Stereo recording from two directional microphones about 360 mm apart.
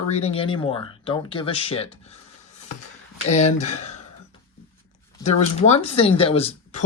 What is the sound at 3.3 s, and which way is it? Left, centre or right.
Speech, centre.